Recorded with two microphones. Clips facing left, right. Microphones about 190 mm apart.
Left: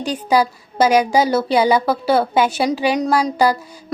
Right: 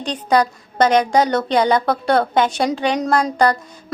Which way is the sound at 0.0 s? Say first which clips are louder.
Even; 5° left (ahead or behind).